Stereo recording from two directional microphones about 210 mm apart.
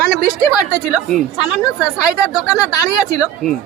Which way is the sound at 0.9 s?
Centre (ahead or behind).